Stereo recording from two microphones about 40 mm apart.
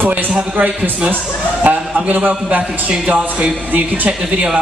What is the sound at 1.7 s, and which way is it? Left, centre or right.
Speech, right.